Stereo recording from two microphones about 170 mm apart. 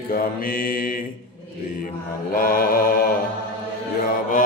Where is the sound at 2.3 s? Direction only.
60° left (ahead or behind).